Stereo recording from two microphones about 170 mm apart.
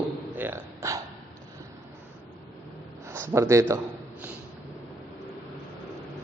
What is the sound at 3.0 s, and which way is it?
Speech, 15° right (ahead or behind).